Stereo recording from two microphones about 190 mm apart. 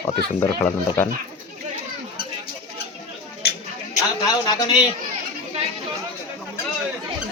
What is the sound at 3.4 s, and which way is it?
Chatter, 55° left (ahead or behind).